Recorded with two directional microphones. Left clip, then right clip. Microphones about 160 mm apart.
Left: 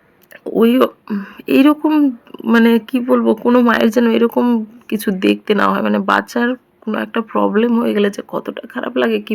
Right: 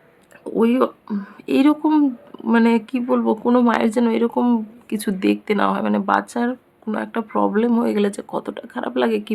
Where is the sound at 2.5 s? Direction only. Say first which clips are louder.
Left 5 dB; 20° left (ahead or behind).